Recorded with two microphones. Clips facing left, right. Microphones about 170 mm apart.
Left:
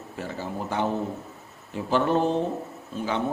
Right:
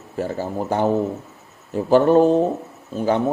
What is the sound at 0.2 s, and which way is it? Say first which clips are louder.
A man's voice: right 8 dB; 40° right (ahead or behind).